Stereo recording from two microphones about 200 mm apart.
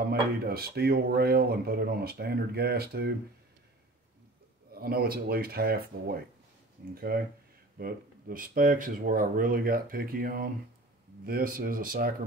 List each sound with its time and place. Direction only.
0.0 s speech: 50° right (ahead or behind)
4.7 s speech: 50° right (ahead or behind)